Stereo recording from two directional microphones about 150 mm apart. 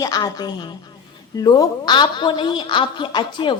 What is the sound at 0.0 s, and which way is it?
A woman's voice, 25° left (ahead or behind).